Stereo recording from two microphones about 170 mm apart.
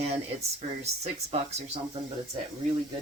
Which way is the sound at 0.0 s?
40° right (ahead or behind).